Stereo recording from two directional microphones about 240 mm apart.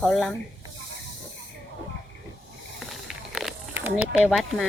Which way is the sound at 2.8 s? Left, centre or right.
Centre.